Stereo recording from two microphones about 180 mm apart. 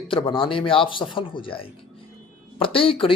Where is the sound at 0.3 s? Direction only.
30° left (ahead or behind).